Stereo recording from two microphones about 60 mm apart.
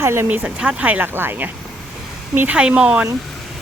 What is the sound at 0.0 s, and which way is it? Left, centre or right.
Speech, right.